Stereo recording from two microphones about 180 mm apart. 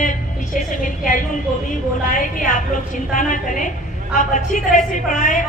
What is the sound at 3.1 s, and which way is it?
A woman's voice, 45° left (ahead or behind).